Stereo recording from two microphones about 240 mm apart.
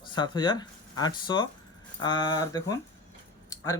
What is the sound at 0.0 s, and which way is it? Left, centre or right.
Speech, centre.